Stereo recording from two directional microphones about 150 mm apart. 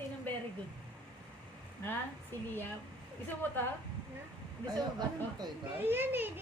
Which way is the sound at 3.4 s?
10° left (ahead or behind).